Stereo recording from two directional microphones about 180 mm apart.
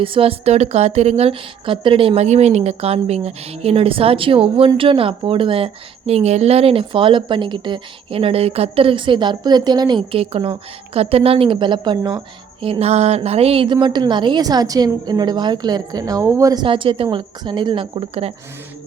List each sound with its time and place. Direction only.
0.0 s a woman's voice: 30° right (ahead or behind)